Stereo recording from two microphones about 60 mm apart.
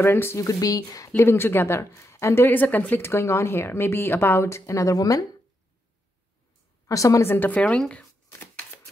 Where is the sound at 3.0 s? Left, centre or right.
Left.